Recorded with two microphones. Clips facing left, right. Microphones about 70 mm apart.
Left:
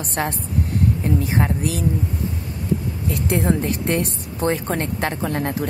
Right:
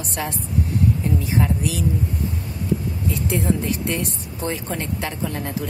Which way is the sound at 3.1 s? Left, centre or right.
Left.